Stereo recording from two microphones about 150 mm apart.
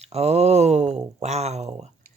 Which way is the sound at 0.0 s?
45° right (ahead or behind).